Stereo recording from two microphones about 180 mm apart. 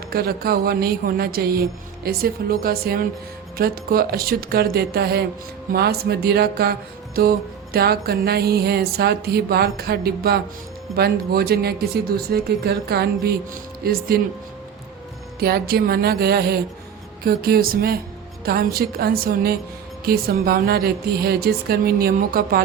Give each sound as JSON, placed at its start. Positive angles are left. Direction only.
{"t": 0.1, "sound": "speech", "side_deg": -60}
{"t": 15.4, "sound": "speech", "side_deg": -60}